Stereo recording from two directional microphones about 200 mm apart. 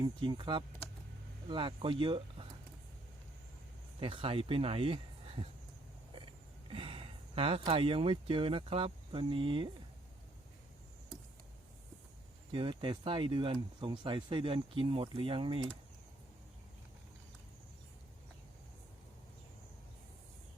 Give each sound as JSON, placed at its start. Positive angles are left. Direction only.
{"t": 0.0, "sound": "speech", "side_deg": -25}
{"t": 4.0, "sound": "speech", "side_deg": -25}
{"t": 12.5, "sound": "speech", "side_deg": -25}